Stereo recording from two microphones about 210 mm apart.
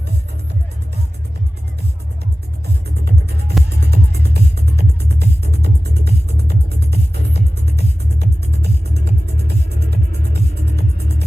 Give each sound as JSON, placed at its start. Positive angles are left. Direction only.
{"t": 2.6, "sound": "music", "side_deg": -50}